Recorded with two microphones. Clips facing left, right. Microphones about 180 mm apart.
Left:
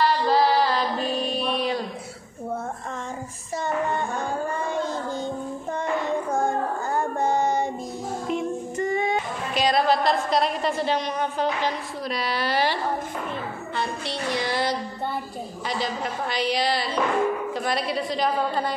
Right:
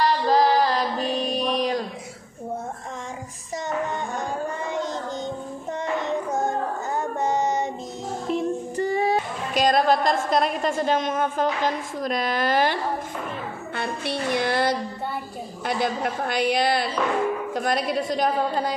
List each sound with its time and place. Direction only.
0.0 s female singing: 40° right (ahead or behind)
3.5 s music: 20° right (ahead or behind)
4.6 s child singing: 20° right (ahead or behind)
8.3 s speech: 35° right (ahead or behind)
13.7 s music: 55° right (ahead or behind)
15.6 s a woman's voice: 55° right (ahead or behind)